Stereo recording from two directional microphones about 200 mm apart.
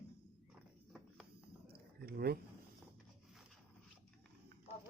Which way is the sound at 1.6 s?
50° right (ahead or behind).